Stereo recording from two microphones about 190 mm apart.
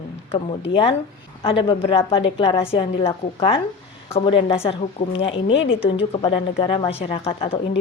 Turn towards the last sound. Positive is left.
turn(degrees=30)  # may be behind; listen again after turning